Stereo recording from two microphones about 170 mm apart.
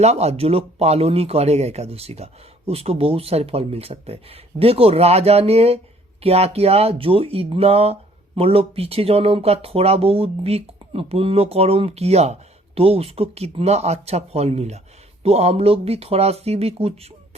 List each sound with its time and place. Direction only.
0.0 s speech: 40° right (ahead or behind)